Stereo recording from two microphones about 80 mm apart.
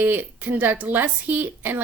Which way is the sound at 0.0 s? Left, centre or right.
Right.